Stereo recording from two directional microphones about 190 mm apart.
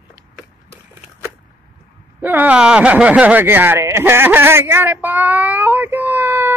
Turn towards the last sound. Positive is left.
turn(degrees=-10)  # may be behind; listen again after turning